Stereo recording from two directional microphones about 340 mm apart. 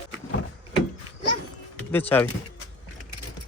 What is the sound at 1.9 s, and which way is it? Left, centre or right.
Speech, centre.